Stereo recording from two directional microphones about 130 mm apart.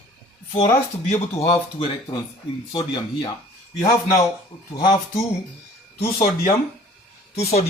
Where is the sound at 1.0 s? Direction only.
55° left (ahead or behind).